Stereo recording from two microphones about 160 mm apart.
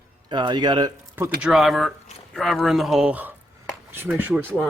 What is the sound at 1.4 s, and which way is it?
Speech, centre (ahead or behind).